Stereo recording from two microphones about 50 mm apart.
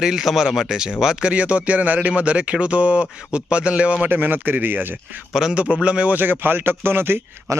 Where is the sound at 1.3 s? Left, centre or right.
Right.